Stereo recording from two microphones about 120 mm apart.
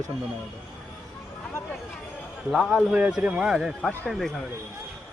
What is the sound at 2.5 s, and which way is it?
A man's voice, centre (ahead or behind).